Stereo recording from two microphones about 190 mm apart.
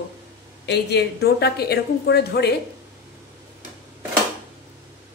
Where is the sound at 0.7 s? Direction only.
60° left (ahead or behind).